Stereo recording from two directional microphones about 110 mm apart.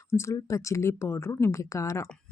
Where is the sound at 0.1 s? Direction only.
25° left (ahead or behind).